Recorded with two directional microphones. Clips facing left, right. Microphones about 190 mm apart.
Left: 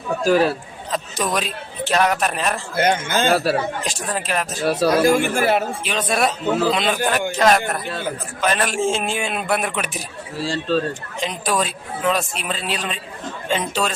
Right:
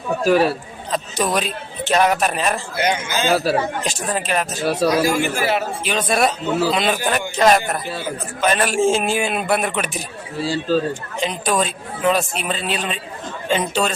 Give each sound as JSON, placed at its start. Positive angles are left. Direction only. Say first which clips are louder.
{"t": 0.3, "sound": "speech", "louder": "right 1 dB", "side_deg": -5}
{"t": 2.7, "sound": "speech", "louder": "left 2 dB", "side_deg": 50}
{"t": 3.2, "sound": "speech", "louder": "right 1 dB", "side_deg": 0}
{"t": 5.2, "sound": "speech", "louder": "left 2 dB", "side_deg": 50}
{"t": 5.8, "sound": "speech", "louder": "right 2 dB", "side_deg": 0}